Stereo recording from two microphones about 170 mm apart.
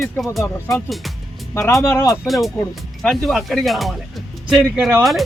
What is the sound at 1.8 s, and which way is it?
Speech, 15° left (ahead or behind).